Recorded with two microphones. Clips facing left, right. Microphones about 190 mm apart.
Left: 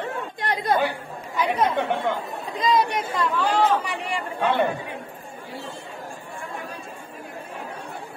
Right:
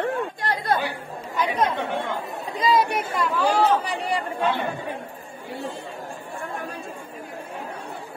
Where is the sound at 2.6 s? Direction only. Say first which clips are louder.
Right 1 dB; 5° right (ahead or behind).